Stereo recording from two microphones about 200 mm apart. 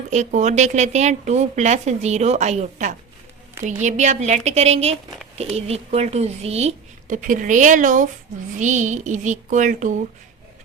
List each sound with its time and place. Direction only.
0.1 s speech: 35° right (ahead or behind)